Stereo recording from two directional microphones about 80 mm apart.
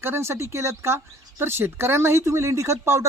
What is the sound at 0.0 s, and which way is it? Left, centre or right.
Speech, right.